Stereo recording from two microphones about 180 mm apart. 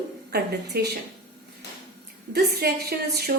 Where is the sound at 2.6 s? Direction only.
60° right (ahead or behind).